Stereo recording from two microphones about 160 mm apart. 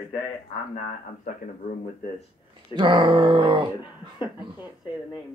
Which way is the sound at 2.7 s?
30° right (ahead or behind).